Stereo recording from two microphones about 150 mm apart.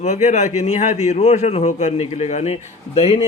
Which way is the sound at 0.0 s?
50° left (ahead or behind).